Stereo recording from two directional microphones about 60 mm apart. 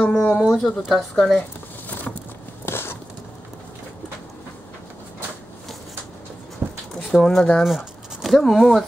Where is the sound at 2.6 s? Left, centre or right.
Left.